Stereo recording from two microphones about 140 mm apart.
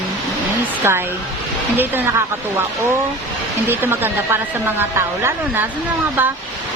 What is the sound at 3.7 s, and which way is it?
Speech, 15° right (ahead or behind).